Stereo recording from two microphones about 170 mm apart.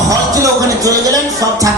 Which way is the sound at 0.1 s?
20° right (ahead or behind).